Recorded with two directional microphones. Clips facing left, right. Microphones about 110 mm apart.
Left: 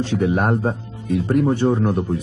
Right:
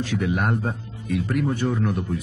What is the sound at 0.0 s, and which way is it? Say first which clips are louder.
A man's voice: left 5 dB; 30° left (ahead or behind).